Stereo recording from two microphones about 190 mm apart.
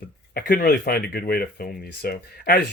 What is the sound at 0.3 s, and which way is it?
Speech, 55° left (ahead or behind).